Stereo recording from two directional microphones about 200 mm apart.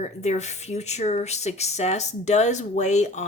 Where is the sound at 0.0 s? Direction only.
35° left (ahead or behind).